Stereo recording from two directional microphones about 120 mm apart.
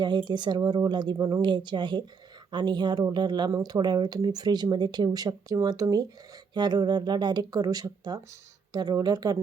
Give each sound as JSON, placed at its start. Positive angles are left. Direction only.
{"t": 0.0, "sound": "speech", "side_deg": -40}